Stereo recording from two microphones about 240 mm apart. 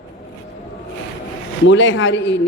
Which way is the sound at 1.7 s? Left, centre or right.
Left.